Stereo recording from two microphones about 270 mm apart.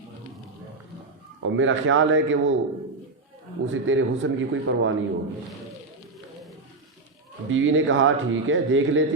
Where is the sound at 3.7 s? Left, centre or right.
Right.